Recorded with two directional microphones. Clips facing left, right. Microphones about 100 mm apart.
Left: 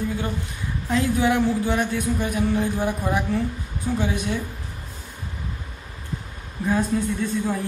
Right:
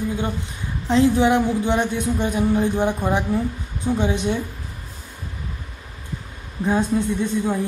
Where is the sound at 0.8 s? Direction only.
25° right (ahead or behind).